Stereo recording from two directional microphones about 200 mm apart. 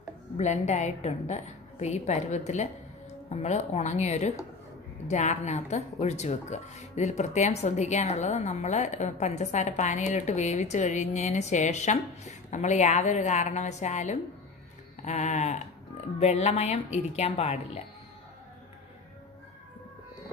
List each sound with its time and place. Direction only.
0.4 s speech: 35° left (ahead or behind)